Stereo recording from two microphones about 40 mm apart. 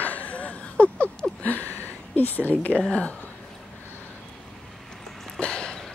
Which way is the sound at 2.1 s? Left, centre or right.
Left.